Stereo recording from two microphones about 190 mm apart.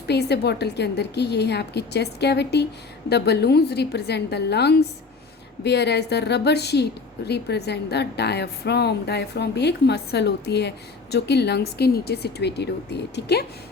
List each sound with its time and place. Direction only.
0.1 s a woman's voice: 60° left (ahead or behind)